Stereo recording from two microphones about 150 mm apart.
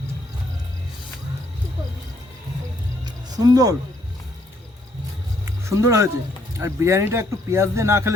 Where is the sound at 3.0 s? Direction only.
25° right (ahead or behind).